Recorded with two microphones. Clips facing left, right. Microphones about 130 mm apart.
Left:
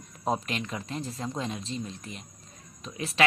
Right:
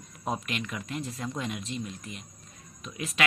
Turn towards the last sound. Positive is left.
turn(degrees=30)  # may be behind; listen again after turning